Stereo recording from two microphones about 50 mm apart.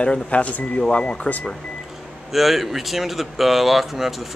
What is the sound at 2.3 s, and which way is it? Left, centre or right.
Speech, centre.